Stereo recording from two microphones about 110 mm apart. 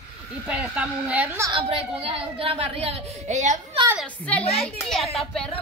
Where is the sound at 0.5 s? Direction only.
10° right (ahead or behind).